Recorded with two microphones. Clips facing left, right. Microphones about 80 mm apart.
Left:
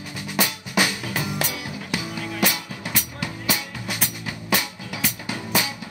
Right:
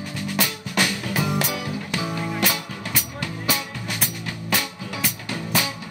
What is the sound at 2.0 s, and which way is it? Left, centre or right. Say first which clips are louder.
Music: right 4 dB; right.